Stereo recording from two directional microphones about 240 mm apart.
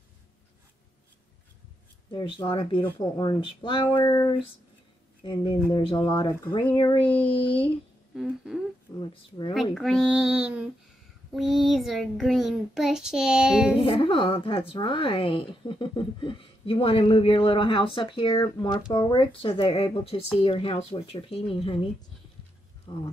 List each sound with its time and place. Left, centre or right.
2.0 s a woman's voice: centre
5.7 s a woman's voice: centre
8.1 s humming: centre
9.5 s child singing: centre
13.8 s a woman's voice: left
22.9 s speech: centre